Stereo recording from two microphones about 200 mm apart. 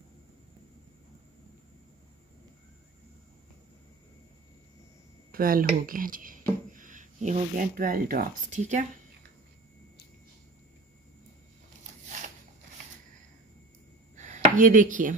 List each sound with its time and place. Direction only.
5.3 s speech: 45° right (ahead or behind)
14.1 s chopping: 40° right (ahead or behind)